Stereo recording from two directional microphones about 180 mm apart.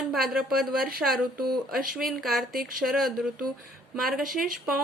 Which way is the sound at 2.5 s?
50° right (ahead or behind).